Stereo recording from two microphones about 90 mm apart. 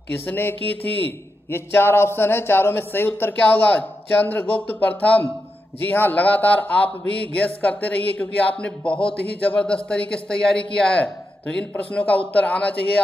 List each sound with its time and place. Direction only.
0.2 s a man's voice: 25° left (ahead or behind)